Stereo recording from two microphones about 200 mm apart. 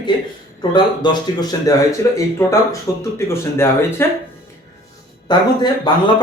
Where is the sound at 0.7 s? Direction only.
20° left (ahead or behind).